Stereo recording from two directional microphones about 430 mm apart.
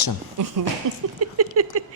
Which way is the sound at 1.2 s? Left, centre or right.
Right.